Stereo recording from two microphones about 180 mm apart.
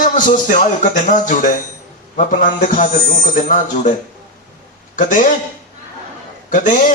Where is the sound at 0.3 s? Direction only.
50° left (ahead or behind).